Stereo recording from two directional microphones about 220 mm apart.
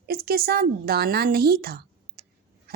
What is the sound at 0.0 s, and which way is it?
A woman's voice, 45° right (ahead or behind).